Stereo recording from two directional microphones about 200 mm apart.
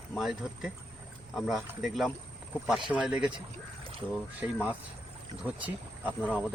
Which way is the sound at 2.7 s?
25° right (ahead or behind).